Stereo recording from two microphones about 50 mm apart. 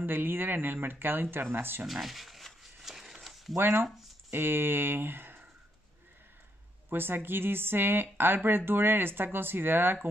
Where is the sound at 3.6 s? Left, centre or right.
Right.